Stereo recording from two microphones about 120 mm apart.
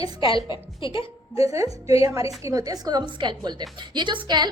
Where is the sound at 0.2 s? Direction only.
45° left (ahead or behind).